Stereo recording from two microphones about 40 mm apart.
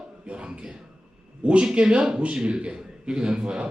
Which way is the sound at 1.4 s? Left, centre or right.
Right.